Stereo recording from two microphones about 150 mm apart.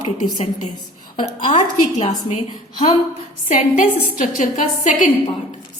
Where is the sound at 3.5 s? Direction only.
55° left (ahead or behind).